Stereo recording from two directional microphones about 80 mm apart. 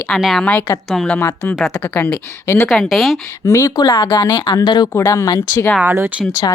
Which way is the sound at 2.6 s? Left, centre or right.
Centre.